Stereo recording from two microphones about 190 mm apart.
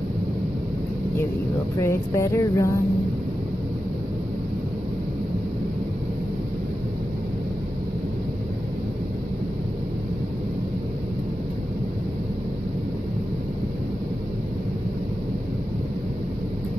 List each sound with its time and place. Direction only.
1.8 s vehicle: 15° left (ahead or behind)